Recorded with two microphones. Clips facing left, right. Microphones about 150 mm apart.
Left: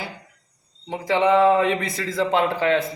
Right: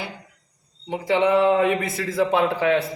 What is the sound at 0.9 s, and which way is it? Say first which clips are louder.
A man's voice: even; 15° right (ahead or behind).